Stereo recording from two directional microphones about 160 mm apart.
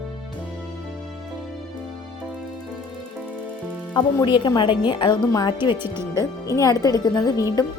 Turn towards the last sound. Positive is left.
turn(degrees=20)  # may be behind; listen again after turning